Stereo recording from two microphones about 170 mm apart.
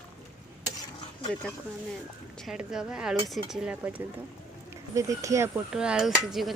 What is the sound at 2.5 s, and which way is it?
Speech, 5° right (ahead or behind).